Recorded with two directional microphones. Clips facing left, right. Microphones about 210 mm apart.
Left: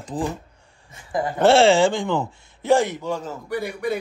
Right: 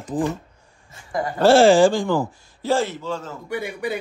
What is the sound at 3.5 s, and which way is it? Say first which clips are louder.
Speech: left 1 dB; centre (ahead or behind).